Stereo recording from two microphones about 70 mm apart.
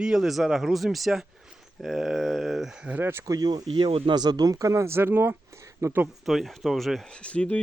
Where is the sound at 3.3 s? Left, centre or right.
Right.